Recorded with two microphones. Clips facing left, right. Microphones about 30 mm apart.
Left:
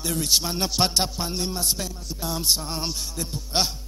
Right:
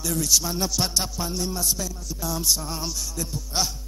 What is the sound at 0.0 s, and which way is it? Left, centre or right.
A man's voice, left.